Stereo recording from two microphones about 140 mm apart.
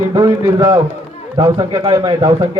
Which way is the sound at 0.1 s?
25° right (ahead or behind).